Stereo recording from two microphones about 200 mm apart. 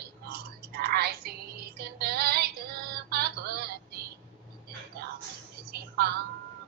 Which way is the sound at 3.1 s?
50° right (ahead or behind).